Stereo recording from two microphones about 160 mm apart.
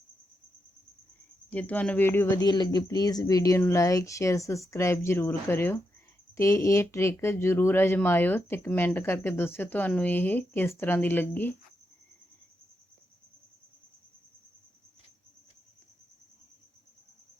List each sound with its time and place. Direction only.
1.5 s speech: 10° left (ahead or behind)